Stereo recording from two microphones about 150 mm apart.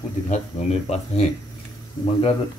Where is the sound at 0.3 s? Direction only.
50° left (ahead or behind).